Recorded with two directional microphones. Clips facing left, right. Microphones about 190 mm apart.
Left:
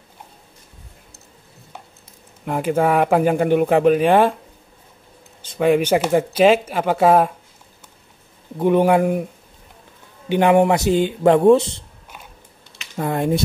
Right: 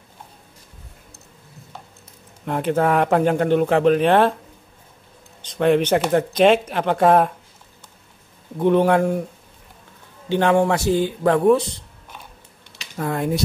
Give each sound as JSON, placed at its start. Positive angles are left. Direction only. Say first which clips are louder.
{"t": 2.4, "sound": "speech", "louder": "left 1 dB", "side_deg": 5}
{"t": 5.4, "sound": "speech", "louder": "left 1 dB", "side_deg": 5}
{"t": 8.5, "sound": "speech", "louder": "left 1 dB", "side_deg": 10}
{"t": 10.2, "sound": "speech", "louder": "left 3 dB", "side_deg": 15}
{"t": 12.9, "sound": "speech", "louder": "left 3 dB", "side_deg": 20}